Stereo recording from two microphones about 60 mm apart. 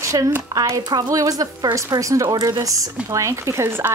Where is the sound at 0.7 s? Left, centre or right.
Right.